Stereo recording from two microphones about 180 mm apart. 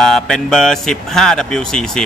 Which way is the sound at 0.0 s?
5° left (ahead or behind).